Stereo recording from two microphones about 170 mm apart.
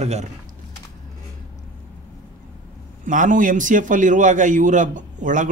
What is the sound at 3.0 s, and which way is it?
Speech, 50° right (ahead or behind).